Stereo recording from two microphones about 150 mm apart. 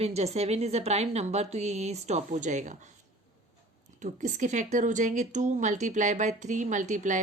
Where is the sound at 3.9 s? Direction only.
55° right (ahead or behind).